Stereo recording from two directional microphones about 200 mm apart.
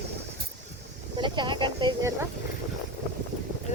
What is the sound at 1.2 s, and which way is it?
Speech, 25° right (ahead or behind).